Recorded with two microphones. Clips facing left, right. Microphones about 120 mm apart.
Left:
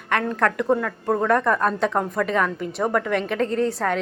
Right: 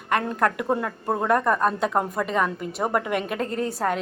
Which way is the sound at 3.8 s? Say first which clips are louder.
Left 1 dB; 20° right (ahead or behind).